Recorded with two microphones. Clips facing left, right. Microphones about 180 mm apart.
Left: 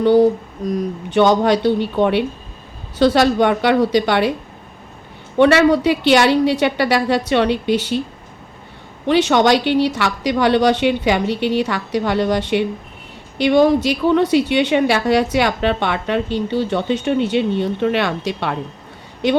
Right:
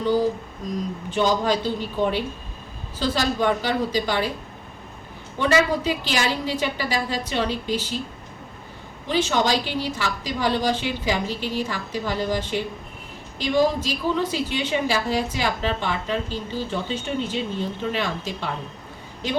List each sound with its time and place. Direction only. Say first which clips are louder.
0.0 s a woman's voice: left 9 dB; 65° left (ahead or behind)
5.4 s a woman's voice: left 9 dB; 70° left (ahead or behind)
9.0 s a woman's voice: left 8 dB; 70° left (ahead or behind)